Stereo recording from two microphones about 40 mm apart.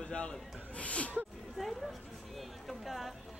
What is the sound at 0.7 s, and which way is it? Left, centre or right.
Gasp, left.